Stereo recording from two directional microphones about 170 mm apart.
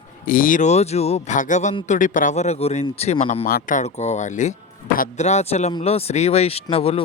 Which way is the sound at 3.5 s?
55° left (ahead or behind).